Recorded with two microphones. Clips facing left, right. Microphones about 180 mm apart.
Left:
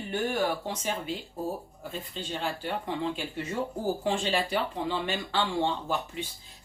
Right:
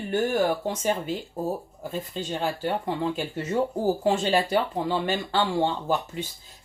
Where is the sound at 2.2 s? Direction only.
45° right (ahead or behind).